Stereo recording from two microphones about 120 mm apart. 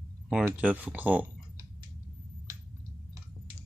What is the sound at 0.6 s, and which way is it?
Speech, 10° right (ahead or behind).